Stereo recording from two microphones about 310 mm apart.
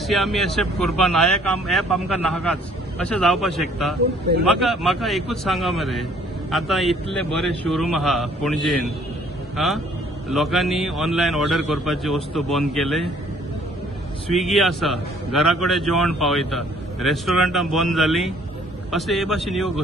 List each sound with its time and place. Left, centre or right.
0.0 s a man's voice: centre
14.3 s a man's voice: centre